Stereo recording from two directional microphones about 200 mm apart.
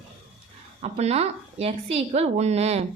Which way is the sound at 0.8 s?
30° right (ahead or behind).